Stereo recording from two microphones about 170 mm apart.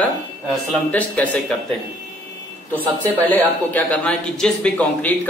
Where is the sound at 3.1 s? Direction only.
10° left (ahead or behind).